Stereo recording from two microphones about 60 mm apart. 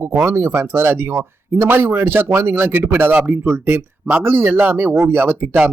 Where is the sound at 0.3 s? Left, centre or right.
Right.